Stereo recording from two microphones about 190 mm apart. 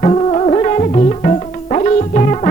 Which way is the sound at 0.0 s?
35° left (ahead or behind).